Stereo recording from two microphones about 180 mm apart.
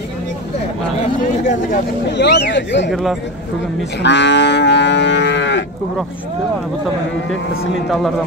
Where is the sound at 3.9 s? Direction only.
75° left (ahead or behind).